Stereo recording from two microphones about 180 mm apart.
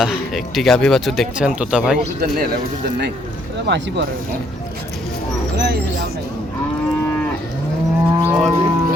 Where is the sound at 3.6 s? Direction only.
75° right (ahead or behind).